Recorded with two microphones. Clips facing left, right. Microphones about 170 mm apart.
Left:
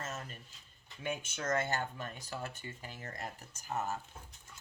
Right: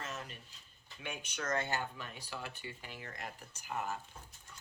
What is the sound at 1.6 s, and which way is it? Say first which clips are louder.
Speech: left 2 dB; 45° left (ahead or behind).